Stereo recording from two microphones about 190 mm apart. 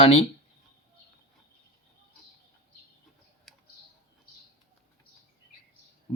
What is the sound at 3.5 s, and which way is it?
Typing, centre (ahead or behind).